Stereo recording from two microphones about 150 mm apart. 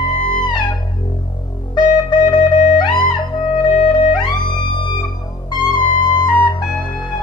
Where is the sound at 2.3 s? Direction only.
65° left (ahead or behind).